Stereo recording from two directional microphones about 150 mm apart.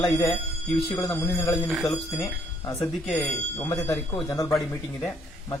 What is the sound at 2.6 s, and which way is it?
Speech, 20° left (ahead or behind).